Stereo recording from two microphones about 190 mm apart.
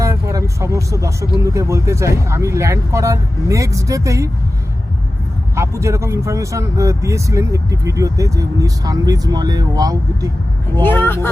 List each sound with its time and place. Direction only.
0.0 s speech: 15° right (ahead or behind)
5.5 s speech: 15° right (ahead or behind)
10.8 s speech: 10° left (ahead or behind)